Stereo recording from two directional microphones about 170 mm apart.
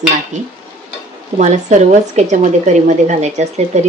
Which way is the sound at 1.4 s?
45° right (ahead or behind).